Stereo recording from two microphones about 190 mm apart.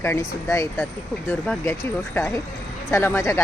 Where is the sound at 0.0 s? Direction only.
15° left (ahead or behind).